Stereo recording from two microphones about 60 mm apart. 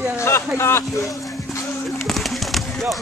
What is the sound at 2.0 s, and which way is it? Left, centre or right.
Pigeon, centre.